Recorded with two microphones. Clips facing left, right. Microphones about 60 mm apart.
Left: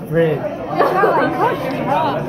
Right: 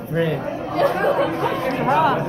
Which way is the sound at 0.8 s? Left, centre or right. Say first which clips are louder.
Left 5 dB; left.